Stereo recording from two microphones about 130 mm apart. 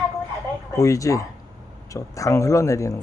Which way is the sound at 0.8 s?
25° left (ahead or behind).